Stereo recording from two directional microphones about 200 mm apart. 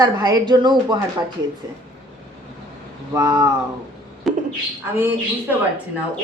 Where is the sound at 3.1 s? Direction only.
15° right (ahead or behind).